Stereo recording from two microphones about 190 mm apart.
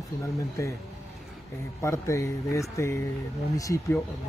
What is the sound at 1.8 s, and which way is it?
Speech, 15° left (ahead or behind).